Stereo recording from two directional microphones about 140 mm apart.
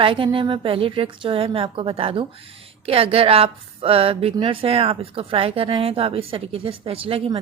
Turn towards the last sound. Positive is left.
turn(degrees=-45)  # may be behind; listen again after turning